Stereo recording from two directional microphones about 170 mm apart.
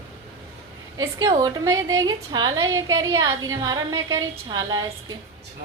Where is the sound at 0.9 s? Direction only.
20° right (ahead or behind).